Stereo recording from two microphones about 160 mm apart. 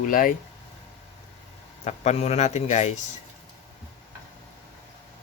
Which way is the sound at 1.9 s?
40° left (ahead or behind).